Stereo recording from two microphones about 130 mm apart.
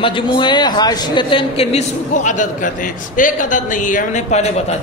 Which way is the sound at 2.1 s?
70° left (ahead or behind).